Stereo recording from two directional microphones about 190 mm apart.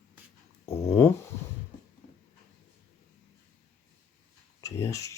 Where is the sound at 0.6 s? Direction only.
15° left (ahead or behind).